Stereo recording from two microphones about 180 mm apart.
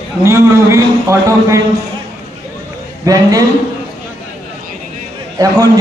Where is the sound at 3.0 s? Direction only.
20° right (ahead or behind).